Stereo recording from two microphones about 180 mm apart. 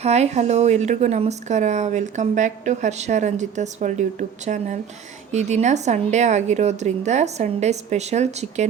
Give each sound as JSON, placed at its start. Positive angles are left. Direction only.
{"t": 0.0, "sound": "a woman's voice", "side_deg": -40}